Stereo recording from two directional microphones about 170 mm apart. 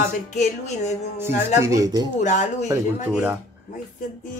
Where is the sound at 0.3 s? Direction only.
45° left (ahead or behind).